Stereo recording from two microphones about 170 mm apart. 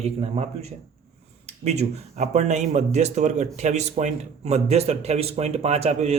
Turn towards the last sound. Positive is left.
turn(degrees=-40)  # may be behind; listen again after turning